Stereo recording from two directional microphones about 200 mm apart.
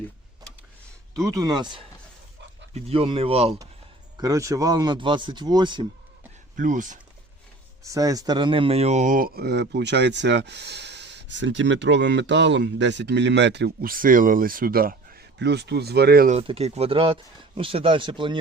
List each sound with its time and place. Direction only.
1.2 s speech: 20° right (ahead or behind)
4.2 s speech: 15° right (ahead or behind)
6.6 s speech: 40° right (ahead or behind)
7.9 s speech: 15° right (ahead or behind); by 16.3 s 50° right (ahead or behind)
16.3 s speech: 30° right (ahead or behind)